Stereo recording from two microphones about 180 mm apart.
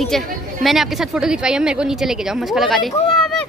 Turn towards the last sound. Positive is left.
turn(degrees=0)  # may be behind; listen again after turning